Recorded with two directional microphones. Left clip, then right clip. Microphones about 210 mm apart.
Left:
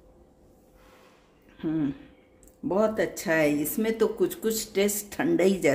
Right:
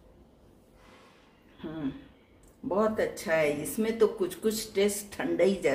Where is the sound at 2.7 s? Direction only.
50° left (ahead or behind).